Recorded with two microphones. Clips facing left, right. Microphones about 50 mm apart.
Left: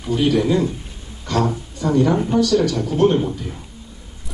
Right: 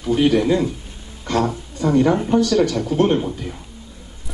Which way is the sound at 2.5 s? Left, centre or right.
Right.